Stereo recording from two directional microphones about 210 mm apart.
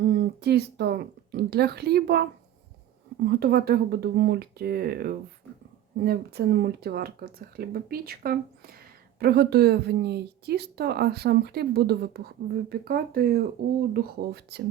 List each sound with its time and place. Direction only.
0.4 s a woman's voice: 50° right (ahead or behind)
3.2 s a woman's voice: 50° right (ahead or behind)